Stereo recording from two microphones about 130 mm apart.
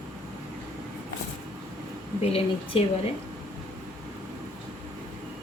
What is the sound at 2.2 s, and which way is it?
Speech, 50° left (ahead or behind).